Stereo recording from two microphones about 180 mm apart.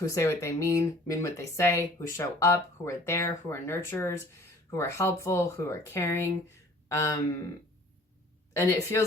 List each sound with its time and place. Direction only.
0.0 s speech: 15° left (ahead or behind)
8.5 s speech: 15° left (ahead or behind)